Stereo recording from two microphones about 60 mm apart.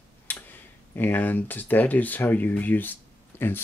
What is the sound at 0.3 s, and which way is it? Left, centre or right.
Tick-tock, left.